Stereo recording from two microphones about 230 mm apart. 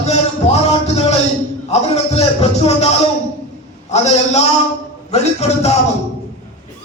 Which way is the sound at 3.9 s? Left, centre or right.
Left.